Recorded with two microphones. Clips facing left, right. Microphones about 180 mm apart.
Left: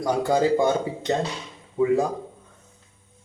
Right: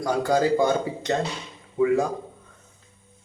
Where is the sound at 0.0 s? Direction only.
20° left (ahead or behind).